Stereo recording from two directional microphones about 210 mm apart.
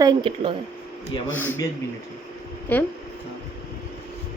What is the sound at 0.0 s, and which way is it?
Speech, 20° right (ahead or behind).